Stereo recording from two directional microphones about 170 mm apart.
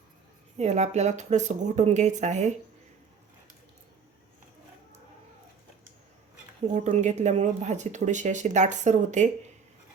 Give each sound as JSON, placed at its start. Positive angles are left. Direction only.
{"t": 0.5, "sound": "speech", "side_deg": -40}
{"t": 6.7, "sound": "speech", "side_deg": -45}